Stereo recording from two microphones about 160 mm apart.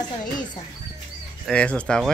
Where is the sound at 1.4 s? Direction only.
5° left (ahead or behind).